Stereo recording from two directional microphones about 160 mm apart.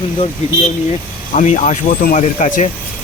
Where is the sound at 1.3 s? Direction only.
50° left (ahead or behind).